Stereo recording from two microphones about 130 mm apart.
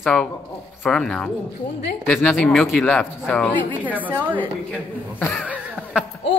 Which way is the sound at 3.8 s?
10° right (ahead or behind).